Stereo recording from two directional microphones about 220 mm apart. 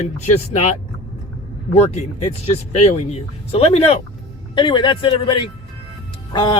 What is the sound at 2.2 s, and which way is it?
Speech, 30° left (ahead or behind).